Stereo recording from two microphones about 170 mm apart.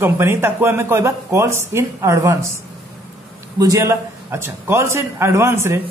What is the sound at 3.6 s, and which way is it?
A man's voice, 20° right (ahead or behind).